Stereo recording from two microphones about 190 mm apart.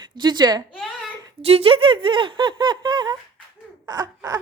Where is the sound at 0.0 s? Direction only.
25° right (ahead or behind).